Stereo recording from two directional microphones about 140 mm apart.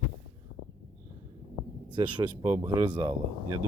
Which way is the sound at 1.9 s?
35° right (ahead or behind).